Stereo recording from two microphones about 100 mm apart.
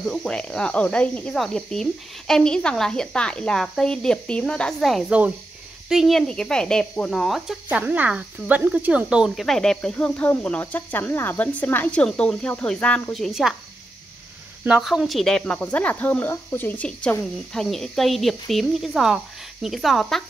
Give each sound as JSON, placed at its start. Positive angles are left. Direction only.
{"t": 0.0, "sound": "speech", "side_deg": 5}
{"t": 7.7, "sound": "speech", "side_deg": -15}
{"t": 9.4, "sound": "speech", "side_deg": 5}
{"t": 13.1, "sound": "speech", "side_deg": 0}
{"t": 14.8, "sound": "speech", "side_deg": 0}
{"t": 17.6, "sound": "speech", "side_deg": 5}